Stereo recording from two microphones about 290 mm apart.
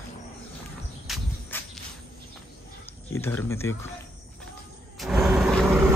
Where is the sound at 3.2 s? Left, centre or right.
Centre.